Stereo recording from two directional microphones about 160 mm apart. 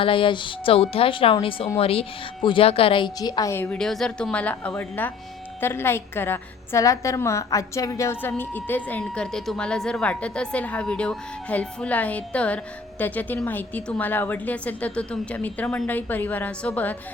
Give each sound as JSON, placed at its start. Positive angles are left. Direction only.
{"t": 0.0, "sound": "a woman's voice", "side_deg": 35}